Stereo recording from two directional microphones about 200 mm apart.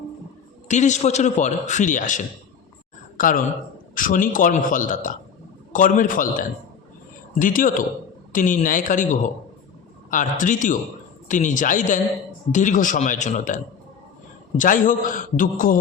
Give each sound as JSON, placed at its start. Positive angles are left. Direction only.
{"t": 0.7, "sound": "a man's voice", "side_deg": 35}